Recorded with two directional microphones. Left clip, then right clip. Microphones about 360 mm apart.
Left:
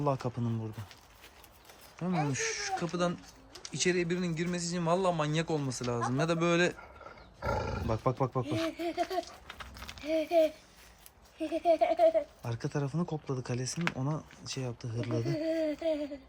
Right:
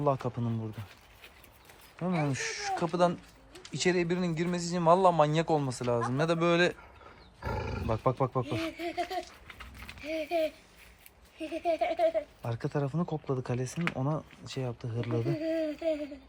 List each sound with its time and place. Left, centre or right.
0.0 s a man's voice: centre
2.2 s a man's voice: centre
8.6 s speech: left
12.4 s a man's voice: centre
15.4 s speech: left